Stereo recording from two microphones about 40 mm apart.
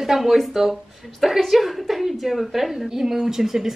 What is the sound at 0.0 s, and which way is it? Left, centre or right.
A woman's voice, centre.